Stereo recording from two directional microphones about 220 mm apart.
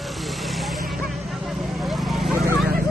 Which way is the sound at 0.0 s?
Centre (ahead or behind).